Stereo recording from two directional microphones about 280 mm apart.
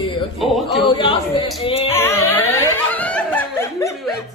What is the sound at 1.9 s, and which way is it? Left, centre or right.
Speech, centre.